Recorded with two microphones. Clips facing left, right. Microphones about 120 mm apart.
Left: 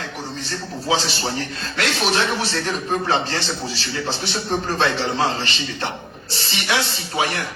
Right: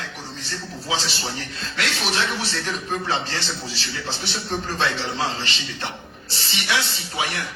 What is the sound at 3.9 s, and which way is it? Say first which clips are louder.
A man's voice: left 6 dB; 45° left (ahead or behind).